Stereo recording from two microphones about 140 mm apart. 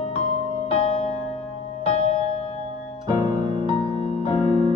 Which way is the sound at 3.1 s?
30° right (ahead or behind).